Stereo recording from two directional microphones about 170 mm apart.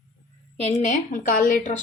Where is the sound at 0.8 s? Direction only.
45° left (ahead or behind).